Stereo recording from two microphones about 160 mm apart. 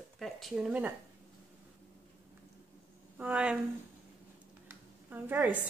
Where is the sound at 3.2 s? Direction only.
10° right (ahead or behind).